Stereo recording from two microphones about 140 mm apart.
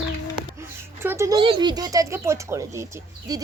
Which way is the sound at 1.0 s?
20° right (ahead or behind).